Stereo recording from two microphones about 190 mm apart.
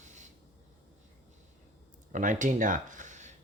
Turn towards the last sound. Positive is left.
turn(degrees=-40)  # may be behind; listen again after turning